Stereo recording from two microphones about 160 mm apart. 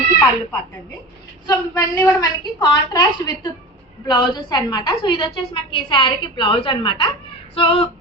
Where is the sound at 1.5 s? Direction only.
20° left (ahead or behind).